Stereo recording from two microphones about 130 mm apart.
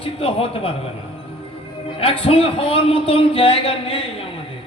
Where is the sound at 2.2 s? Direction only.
45° left (ahead or behind).